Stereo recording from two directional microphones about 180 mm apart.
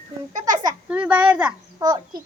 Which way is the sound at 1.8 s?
20° right (ahead or behind).